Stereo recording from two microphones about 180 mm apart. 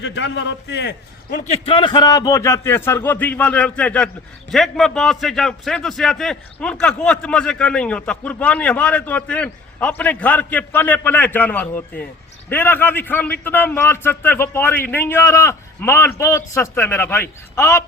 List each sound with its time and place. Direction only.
0.0 s a man's voice: 75° left (ahead or behind)
1.5 s a man's voice: 30° left (ahead or behind); by 17.8 s 15° left (ahead or behind)